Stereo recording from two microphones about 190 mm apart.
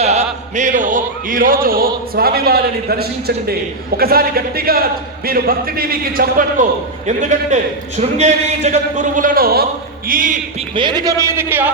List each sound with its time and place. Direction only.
0.0 s music: 35° right (ahead or behind)
0.5 s a man's voice: 40° right (ahead or behind)
10.8 s a man's voice: 25° right (ahead or behind)